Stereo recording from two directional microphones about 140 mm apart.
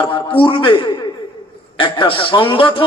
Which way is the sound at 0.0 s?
35° left (ahead or behind).